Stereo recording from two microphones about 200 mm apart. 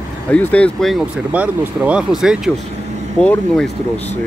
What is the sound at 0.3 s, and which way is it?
Speech, 5° left (ahead or behind).